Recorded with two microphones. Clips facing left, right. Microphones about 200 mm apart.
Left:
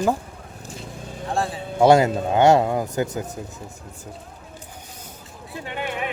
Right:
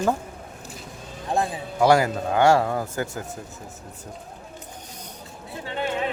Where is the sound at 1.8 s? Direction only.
25° left (ahead or behind).